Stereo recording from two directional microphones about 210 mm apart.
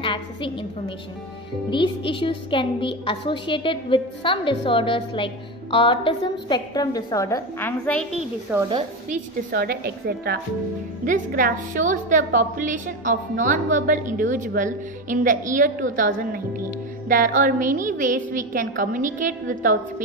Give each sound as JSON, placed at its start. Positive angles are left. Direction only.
{"t": 0.0, "sound": "a woman's voice", "side_deg": 25}
{"t": 8.5, "sound": "a woman's voice", "side_deg": -10}
{"t": 9.1, "sound": "a woman's voice", "side_deg": -45}
{"t": 17.1, "sound": "a woman's voice", "side_deg": -40}